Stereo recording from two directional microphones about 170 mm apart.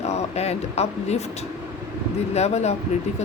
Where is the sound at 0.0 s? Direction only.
40° left (ahead or behind).